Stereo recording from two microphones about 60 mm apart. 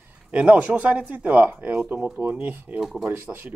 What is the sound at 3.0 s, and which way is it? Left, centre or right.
Speech, right.